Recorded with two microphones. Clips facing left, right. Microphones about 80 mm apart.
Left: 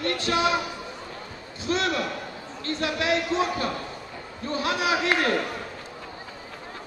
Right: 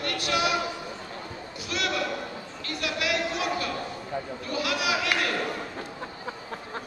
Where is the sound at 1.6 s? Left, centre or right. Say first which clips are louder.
Left 3 dB; left.